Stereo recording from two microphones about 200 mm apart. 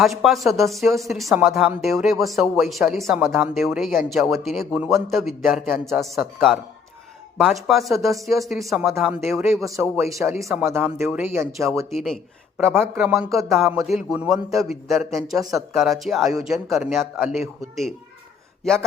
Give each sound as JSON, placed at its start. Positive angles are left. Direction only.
{"t": 0.0, "sound": "a woman's voice", "side_deg": 0}
{"t": 9.4, "sound": "speech", "side_deg": -15}
{"t": 11.9, "sound": "a woman's voice", "side_deg": 0}
{"t": 18.6, "sound": "speech", "side_deg": 0}